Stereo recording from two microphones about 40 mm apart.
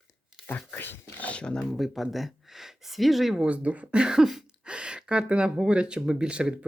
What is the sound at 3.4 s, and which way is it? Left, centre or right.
Speech, right.